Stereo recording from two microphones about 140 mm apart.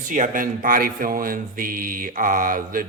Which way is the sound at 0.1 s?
75° right (ahead or behind).